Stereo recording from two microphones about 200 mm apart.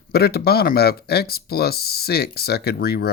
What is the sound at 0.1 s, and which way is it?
Speech, 50° left (ahead or behind).